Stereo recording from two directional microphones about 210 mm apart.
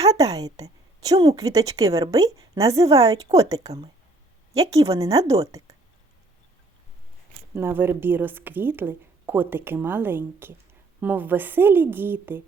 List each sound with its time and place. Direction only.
0.0 s a woman's voice: 15° right (ahead or behind)
7.5 s a woman's voice: 10° right (ahead or behind)